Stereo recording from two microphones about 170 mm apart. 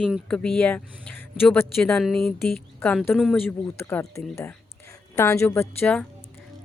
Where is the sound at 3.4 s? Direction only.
10° left (ahead or behind).